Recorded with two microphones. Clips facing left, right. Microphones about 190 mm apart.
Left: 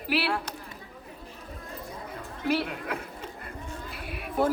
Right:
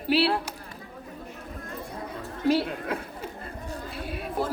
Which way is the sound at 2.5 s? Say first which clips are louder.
Right 4 dB; 30° right (ahead or behind).